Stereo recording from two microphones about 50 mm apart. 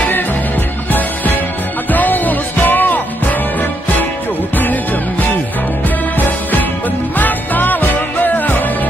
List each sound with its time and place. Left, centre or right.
0.9 s music: left
7.2 s music: left